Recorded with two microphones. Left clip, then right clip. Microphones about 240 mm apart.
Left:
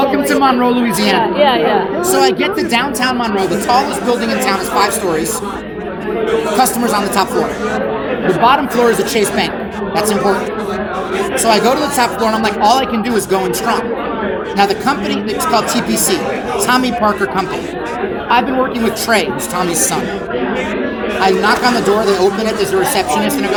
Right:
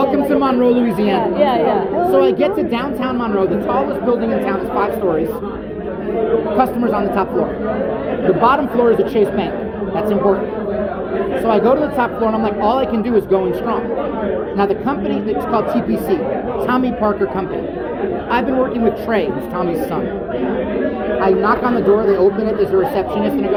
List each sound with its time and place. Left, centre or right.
0.0 s a woman's voice: left
6.6 s speech: left
11.4 s a woman's voice: left
18.9 s speech: left
21.2 s speech: left